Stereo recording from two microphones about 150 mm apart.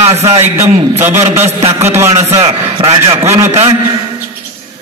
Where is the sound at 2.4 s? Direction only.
30° right (ahead or behind).